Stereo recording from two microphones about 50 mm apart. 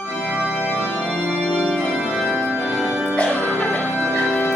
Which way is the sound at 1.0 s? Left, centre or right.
Centre.